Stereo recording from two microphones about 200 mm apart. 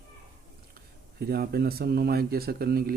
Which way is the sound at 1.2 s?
50° right (ahead or behind).